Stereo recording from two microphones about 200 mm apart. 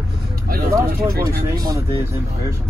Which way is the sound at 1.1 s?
50° right (ahead or behind).